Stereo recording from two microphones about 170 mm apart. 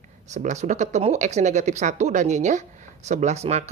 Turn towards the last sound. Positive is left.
turn(degrees=-40)  # may be behind; listen again after turning